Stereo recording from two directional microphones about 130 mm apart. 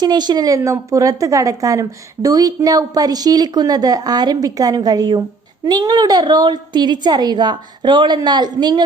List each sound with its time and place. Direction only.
0.0 s a woman's voice: 35° right (ahead or behind)